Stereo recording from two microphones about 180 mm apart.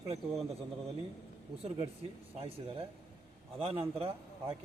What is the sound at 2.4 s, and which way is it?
A man's voice, 35° right (ahead or behind).